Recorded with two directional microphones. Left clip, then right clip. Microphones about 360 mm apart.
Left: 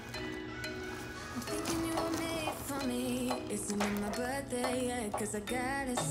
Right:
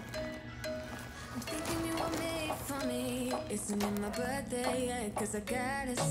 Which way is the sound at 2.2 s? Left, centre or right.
Centre.